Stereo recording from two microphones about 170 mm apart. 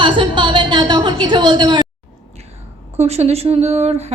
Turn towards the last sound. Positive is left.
turn(degrees=-40)  # may be behind; listen again after turning